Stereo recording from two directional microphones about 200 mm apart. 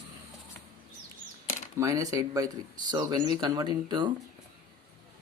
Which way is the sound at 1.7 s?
15° right (ahead or behind).